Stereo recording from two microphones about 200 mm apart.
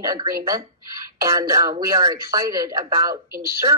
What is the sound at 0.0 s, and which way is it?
Speech, 20° right (ahead or behind).